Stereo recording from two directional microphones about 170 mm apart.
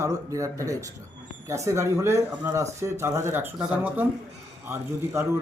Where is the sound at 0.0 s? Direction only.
20° right (ahead or behind).